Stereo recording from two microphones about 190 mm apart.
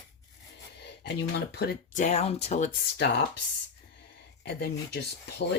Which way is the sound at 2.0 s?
35° left (ahead or behind).